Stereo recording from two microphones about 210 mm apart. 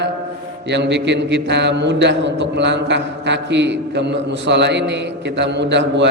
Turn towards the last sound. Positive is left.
turn(degrees=-55)  # may be behind; listen again after turning